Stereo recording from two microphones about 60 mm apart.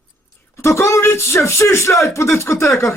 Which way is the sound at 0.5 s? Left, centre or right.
Left.